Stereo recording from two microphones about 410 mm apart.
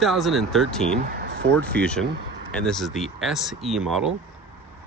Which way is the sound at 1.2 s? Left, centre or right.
Right.